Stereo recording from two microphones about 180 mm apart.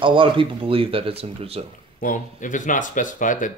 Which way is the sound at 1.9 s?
45° left (ahead or behind).